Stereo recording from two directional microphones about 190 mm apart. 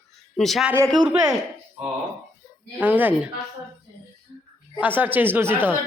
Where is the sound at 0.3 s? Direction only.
Centre (ahead or behind).